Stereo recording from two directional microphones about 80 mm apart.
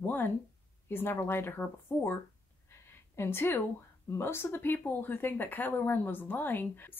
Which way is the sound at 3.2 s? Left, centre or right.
Left.